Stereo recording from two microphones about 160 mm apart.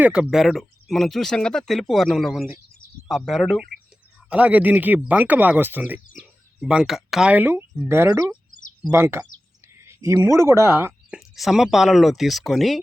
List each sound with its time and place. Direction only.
0.0 s speech: 5° right (ahead or behind)
9.8 s a sound: 20° right (ahead or behind)
10.3 s speech: 15° right (ahead or behind)
11.1 s speech: centre (ahead or behind)